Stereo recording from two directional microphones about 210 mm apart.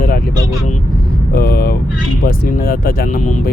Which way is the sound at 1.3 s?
45° left (ahead or behind).